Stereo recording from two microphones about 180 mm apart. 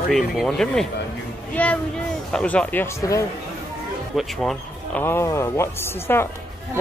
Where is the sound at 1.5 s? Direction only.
10° left (ahead or behind).